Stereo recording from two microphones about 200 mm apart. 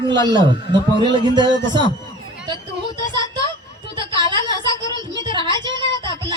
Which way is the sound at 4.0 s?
20° right (ahead or behind).